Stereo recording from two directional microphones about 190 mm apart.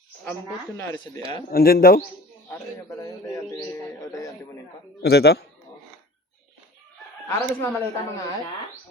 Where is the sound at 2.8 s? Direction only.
15° left (ahead or behind).